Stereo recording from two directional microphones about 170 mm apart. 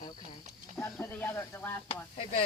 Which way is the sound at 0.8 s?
15° left (ahead or behind).